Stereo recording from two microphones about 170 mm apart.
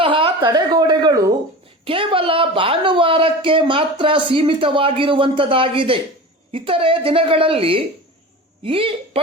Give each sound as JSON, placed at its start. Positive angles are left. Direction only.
{"t": 0.0, "sound": "a woman's voice", "side_deg": -30}